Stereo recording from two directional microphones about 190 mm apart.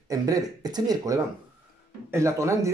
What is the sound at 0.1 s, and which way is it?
Speech, 20° right (ahead or behind).